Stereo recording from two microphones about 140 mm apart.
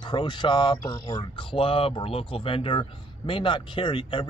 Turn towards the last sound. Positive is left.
turn(degrees=35)  # may be behind; listen again after turning